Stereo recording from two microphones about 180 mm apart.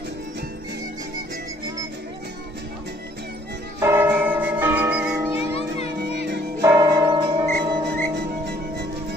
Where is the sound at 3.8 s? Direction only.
15° right (ahead or behind).